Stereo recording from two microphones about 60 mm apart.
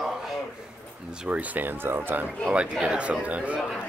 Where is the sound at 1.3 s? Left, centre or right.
Right.